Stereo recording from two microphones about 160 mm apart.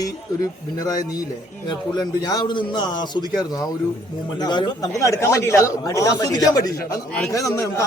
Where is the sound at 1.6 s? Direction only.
25° left (ahead or behind).